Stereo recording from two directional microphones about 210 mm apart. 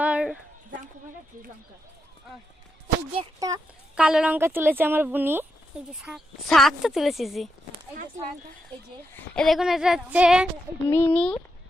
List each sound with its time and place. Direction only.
0.0 s a sound: 5° right (ahead or behind)
3.1 s speech: 20° right (ahead or behind)
3.9 s speech: 5° right (ahead or behind)
9.1 s speech: 5° left (ahead or behind)
10.8 s speech: 10° left (ahead or behind)